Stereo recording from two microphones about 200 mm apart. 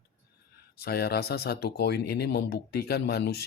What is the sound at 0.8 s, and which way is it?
Speech, 50° left (ahead or behind).